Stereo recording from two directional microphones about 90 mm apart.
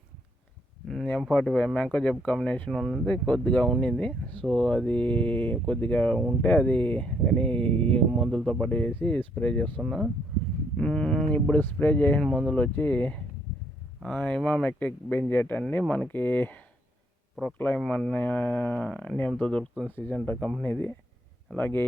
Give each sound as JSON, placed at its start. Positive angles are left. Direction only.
{"t": 1.3, "sound": "speech", "side_deg": 10}
{"t": 3.1, "sound": "speech", "side_deg": 10}
{"t": 8.1, "sound": "speech", "side_deg": 0}
{"t": 8.6, "sound": "speech", "side_deg": 15}
{"t": 9.8, "sound": "speech", "side_deg": 0}
{"t": 12.2, "sound": "speech", "side_deg": 5}
{"t": 17.7, "sound": "speech", "side_deg": 5}
{"t": 18.1, "sound": "speech", "side_deg": 15}
{"t": 20.2, "sound": "speech", "side_deg": 20}